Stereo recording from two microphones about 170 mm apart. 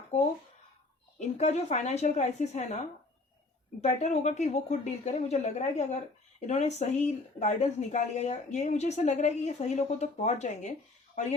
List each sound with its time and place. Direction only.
1.2 s a woman's voice: 40° left (ahead or behind)